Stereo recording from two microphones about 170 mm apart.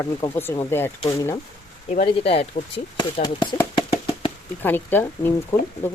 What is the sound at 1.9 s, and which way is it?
Speech, 35° left (ahead or behind).